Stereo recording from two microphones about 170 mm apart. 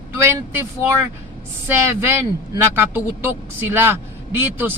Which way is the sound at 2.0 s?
15° right (ahead or behind).